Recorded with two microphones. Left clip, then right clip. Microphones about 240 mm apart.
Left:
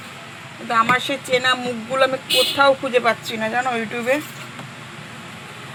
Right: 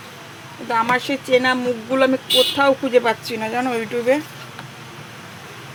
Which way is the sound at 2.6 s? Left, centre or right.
Right.